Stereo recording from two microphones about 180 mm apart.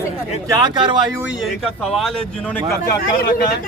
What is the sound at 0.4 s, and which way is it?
Speech, 20° right (ahead or behind).